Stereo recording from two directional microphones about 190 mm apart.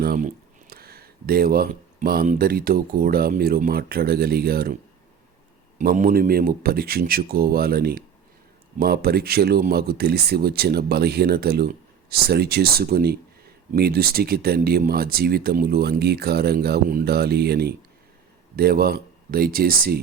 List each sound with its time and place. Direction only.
0.0 s speech: 45° right (ahead or behind)
5.8 s speech: 45° right (ahead or behind)